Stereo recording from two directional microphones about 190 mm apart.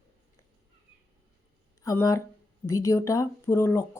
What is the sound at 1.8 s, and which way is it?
Speech, 15° left (ahead or behind).